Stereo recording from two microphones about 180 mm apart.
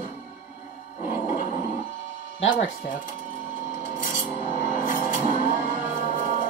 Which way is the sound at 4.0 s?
50° left (ahead or behind).